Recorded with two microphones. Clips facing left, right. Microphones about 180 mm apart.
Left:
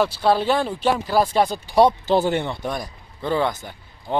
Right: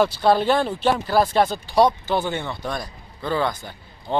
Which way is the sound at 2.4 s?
20° left (ahead or behind).